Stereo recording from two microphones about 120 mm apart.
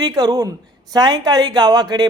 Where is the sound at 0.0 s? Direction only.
35° right (ahead or behind).